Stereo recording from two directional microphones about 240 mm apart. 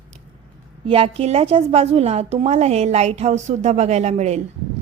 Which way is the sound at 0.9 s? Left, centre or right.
Right.